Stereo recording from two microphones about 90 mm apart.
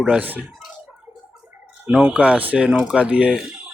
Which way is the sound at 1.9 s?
15° right (ahead or behind).